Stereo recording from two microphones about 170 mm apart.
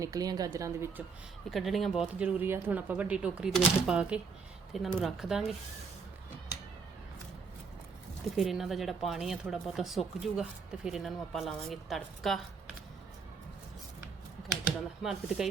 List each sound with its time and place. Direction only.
0.0 s a woman's voice: 20° right (ahead or behind)
1.5 s speech: centre (ahead or behind)
8.4 s speech: centre (ahead or behind)
15.0 s speech: centre (ahead or behind)